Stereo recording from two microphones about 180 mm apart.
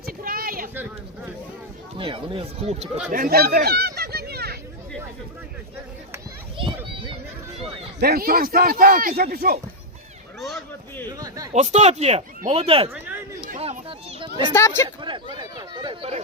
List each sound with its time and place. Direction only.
0.0 s a sound: 55° right (ahead or behind)
0.7 s a sound: 10° right (ahead or behind)
2.0 s speech: 30° right (ahead or behind)
3.1 s speech: 55° right (ahead or behind)
6.6 s children playing: 30° right (ahead or behind)
7.9 s speech: 60° right (ahead or behind)
11.5 s speech: 40° right (ahead or behind)
13.6 s children playing: 35° right (ahead or behind)
14.5 s speech: 15° left (ahead or behind)
14.8 s a sound: 25° right (ahead or behind)